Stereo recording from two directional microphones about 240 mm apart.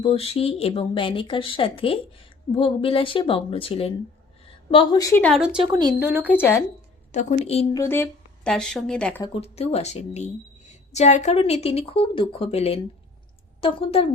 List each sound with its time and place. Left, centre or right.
0.0 s a woman's voice: left; by 5.5 s centre
5.5 s speech: centre
6.4 s a woman's voice: centre
7.1 s a woman's voice: left
7.8 s speech: centre
9.2 s a woman's voice: left